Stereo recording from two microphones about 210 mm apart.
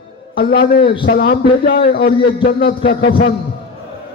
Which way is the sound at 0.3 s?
45° left (ahead or behind).